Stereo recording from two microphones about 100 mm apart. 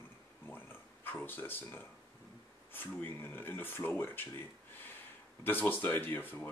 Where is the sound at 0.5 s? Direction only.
20° left (ahead or behind).